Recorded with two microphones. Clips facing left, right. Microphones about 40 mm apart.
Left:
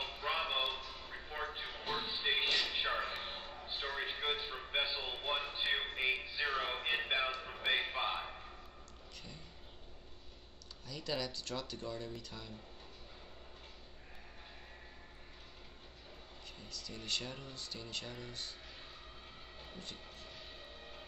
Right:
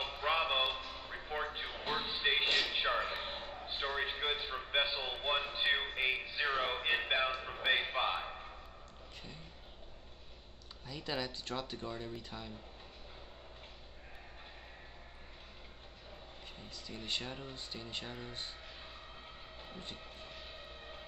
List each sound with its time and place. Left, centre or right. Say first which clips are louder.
0.1 s music: right 5 dB; right
0.9 s a sound: right 4 dB; centre
5.5 s music: right 3 dB; right
7.2 s a sound: right 3 dB; centre
10.9 s speech: right 1 dB; right
16.6 s speech: right 1 dB; right
19.6 s train: right 2 dB; right